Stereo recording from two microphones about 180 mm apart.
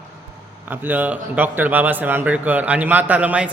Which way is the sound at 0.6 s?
10° right (ahead or behind).